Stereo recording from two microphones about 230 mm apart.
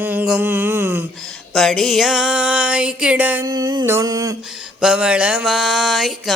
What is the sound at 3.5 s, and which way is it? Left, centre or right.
Speech, centre.